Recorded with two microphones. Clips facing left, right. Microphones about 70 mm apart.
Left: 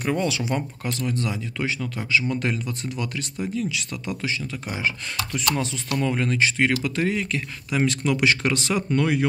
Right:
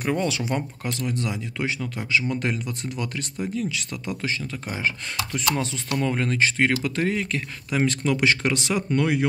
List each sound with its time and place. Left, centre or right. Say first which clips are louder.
0.0 s speech: even; right
5.1 s speech: even; centre
6.1 s speech: even; right